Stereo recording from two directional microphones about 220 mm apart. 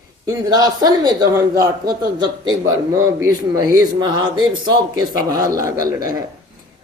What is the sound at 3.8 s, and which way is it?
A man's voice, 20° right (ahead or behind).